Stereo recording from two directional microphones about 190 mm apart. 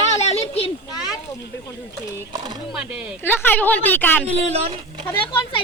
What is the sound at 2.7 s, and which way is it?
Speech, 5° right (ahead or behind).